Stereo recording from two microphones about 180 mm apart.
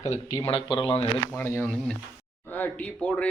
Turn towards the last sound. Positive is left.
turn(degrees=10)  # may be behind; listen again after turning